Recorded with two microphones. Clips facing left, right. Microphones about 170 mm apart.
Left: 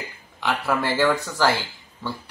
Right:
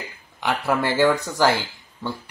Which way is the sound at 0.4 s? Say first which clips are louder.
Right 1 dB; 15° right (ahead or behind).